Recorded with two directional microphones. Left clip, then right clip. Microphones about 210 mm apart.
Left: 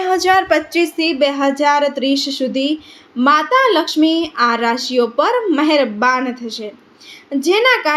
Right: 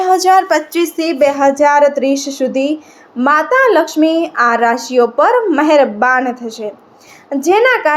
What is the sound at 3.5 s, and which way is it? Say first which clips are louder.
Speech: right 3 dB; centre (ahead or behind).